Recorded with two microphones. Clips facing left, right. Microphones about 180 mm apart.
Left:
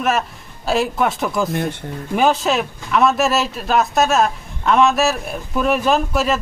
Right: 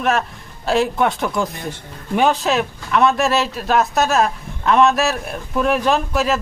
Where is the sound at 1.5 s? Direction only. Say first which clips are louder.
Left 7 dB; 60° left (ahead or behind).